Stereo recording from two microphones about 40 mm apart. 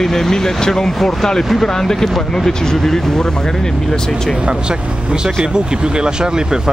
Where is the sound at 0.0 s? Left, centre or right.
Centre.